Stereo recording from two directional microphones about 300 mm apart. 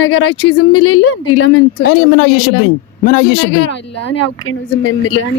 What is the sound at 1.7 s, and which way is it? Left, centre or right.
A woman's voice, left.